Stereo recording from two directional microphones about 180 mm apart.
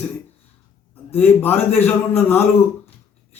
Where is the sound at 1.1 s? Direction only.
10° left (ahead or behind).